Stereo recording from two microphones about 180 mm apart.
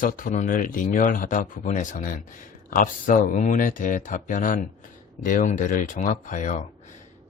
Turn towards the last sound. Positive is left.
turn(degrees=45)  # may be behind; listen again after turning